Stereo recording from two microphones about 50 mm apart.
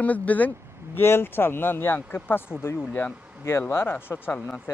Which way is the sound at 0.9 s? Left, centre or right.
Left.